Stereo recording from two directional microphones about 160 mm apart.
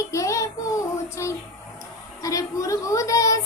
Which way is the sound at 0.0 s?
20° left (ahead or behind).